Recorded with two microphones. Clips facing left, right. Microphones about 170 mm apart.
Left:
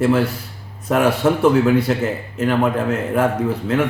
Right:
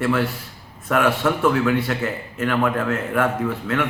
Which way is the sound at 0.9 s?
40° left (ahead or behind).